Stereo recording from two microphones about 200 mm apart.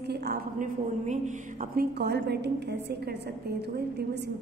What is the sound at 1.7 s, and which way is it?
A woman's voice, 55° right (ahead or behind).